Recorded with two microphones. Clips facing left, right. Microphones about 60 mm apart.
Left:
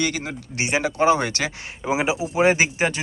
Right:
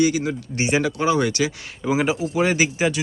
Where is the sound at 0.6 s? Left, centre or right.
Left.